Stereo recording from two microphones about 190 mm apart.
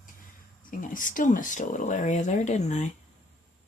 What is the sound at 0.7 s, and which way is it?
Speech, 45° left (ahead or behind).